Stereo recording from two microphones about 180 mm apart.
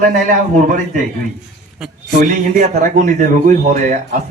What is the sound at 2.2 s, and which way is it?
Speech, 45° right (ahead or behind).